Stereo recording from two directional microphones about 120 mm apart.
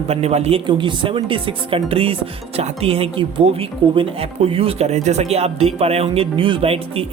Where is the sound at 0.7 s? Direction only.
40° right (ahead or behind).